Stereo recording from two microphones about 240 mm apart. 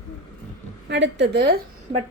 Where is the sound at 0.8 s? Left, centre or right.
Right.